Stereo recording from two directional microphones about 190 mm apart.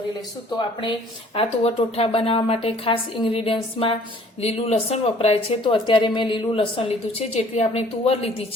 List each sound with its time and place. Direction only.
0.8 s speech: 25° left (ahead or behind)